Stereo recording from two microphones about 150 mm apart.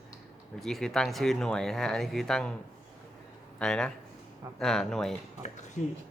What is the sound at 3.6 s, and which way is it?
Speech, 5° left (ahead or behind).